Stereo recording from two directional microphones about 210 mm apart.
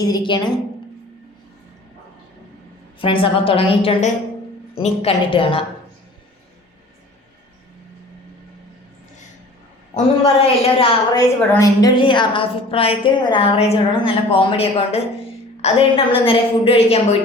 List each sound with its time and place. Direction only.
0.0 s a woman's voice: 20° left (ahead or behind)
3.0 s a woman's voice: 25° left (ahead or behind)
10.2 s a woman's voice: 25° left (ahead or behind)